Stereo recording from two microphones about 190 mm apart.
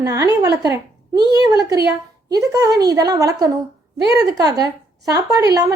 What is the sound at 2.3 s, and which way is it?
A woman's voice, 20° right (ahead or behind).